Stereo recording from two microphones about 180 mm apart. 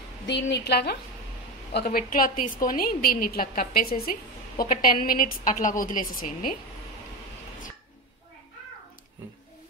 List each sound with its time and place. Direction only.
0.3 s a woman's voice: 65° left (ahead or behind); by 6.5 s 50° left (ahead or behind)